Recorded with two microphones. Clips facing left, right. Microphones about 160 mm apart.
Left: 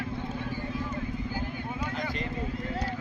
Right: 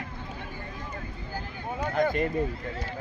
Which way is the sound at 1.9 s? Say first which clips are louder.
Right 8 dB; 50° right (ahead or behind).